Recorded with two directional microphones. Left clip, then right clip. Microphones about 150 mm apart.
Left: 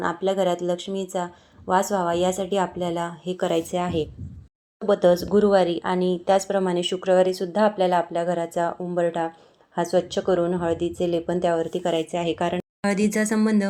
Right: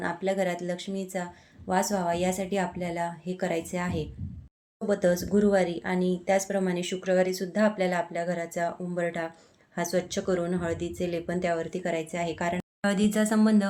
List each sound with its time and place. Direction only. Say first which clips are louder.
0.0 s speech: left 5 dB; 5° left (ahead or behind)
12.8 s speech: left 3 dB; 20° left (ahead or behind)